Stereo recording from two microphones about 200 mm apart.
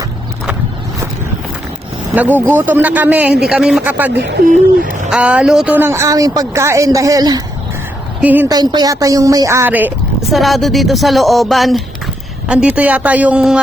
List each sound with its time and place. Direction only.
2.1 s speech: 10° right (ahead or behind)
4.4 s owl: 45° right (ahead or behind)
5.1 s a woman's voice: 5° right (ahead or behind)